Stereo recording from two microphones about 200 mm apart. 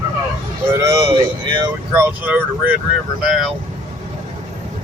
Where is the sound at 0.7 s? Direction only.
15° right (ahead or behind).